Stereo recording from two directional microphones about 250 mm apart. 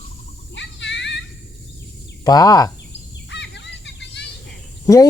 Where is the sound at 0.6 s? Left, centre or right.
Left.